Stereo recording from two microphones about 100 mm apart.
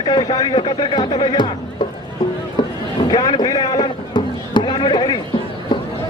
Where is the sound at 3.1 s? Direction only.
45° left (ahead or behind).